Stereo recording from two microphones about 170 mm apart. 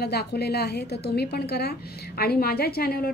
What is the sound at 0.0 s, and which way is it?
A woman's voice, 70° left (ahead or behind).